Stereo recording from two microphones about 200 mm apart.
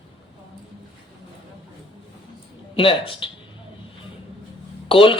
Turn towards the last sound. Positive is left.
turn(degrees=25)  # may be behind; listen again after turning